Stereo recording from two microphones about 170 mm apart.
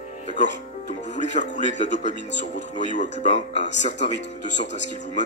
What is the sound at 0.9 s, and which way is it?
Speech, 45° left (ahead or behind).